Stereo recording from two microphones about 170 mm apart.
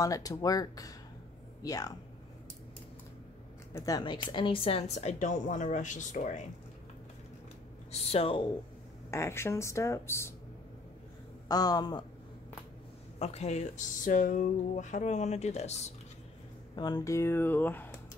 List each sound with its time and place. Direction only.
0.0 s speech: 20° left (ahead or behind)
3.7 s a woman's voice: 20° left (ahead or behind); by 6.4 s 45° left (ahead or behind)
7.9 s a woman's voice: 35° left (ahead or behind)
9.1 s speech: 15° left (ahead or behind)
11.4 s speech: 25° left (ahead or behind)
13.2 s speech: 40° left (ahead or behind)
16.7 s speech: 25° left (ahead or behind)